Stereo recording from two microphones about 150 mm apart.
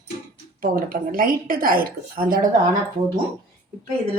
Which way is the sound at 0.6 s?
70° right (ahead or behind).